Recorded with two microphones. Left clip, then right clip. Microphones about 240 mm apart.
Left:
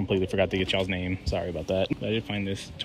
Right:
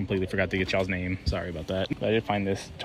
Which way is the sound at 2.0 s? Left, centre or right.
Centre.